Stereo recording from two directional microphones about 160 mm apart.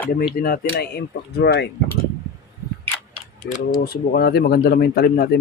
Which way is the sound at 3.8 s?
70° left (ahead or behind).